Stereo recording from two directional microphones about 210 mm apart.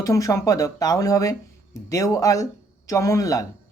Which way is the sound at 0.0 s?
15° left (ahead or behind).